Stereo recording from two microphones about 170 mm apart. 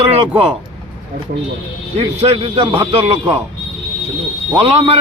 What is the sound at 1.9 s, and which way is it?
A man's voice, 35° right (ahead or behind).